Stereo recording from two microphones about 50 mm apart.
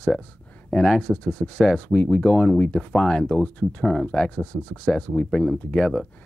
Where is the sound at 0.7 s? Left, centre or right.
Centre.